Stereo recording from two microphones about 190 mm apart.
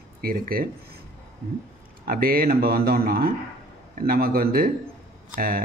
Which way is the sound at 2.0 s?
50° right (ahead or behind).